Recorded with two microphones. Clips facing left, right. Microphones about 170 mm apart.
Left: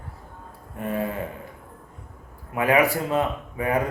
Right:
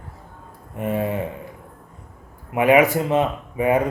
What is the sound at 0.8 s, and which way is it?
Speech, 20° right (ahead or behind).